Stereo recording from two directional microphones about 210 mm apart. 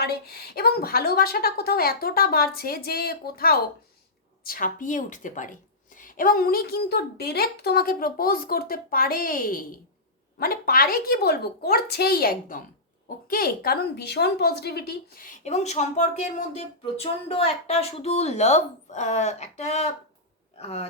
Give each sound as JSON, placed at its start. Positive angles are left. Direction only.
{"t": 0.0, "sound": "a woman's voice", "side_deg": 50}